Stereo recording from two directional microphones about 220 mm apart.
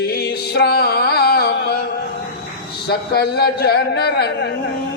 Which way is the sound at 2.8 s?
45° left (ahead or behind).